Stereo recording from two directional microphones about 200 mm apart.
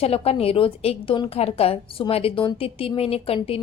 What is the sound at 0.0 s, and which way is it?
A woman's voice, 30° left (ahead or behind).